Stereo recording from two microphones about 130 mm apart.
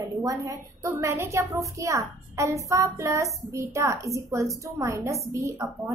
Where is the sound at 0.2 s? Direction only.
25° right (ahead or behind).